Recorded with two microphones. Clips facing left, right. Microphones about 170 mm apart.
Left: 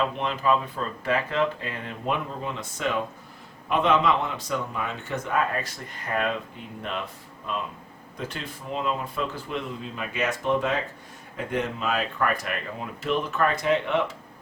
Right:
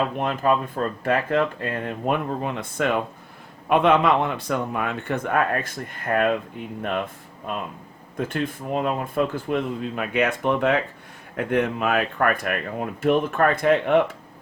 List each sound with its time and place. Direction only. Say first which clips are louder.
0.2 s speech: right 3 dB; 50° right (ahead or behind)